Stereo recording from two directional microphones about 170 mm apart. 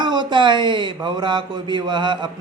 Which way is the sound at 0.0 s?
25° right (ahead or behind).